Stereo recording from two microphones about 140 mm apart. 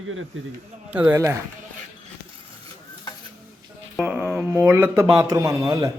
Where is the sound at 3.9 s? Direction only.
10° right (ahead or behind).